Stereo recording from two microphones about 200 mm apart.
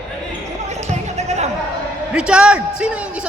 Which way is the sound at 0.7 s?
35° right (ahead or behind).